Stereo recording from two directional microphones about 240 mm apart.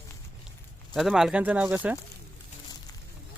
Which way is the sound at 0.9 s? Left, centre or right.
Centre.